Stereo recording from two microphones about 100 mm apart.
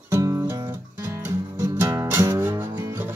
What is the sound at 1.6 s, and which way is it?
Music, 30° right (ahead or behind).